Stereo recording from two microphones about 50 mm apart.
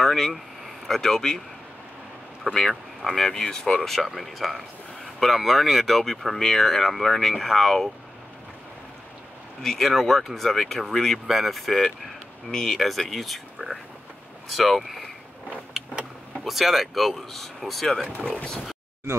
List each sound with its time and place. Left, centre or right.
0.0 s speech: centre
2.7 s speech: centre
3.3 s speech: centre
9.6 s speech: centre
16.3 s speech: centre
18.2 s speech: centre